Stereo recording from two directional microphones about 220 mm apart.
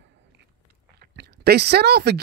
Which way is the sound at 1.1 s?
50° right (ahead or behind).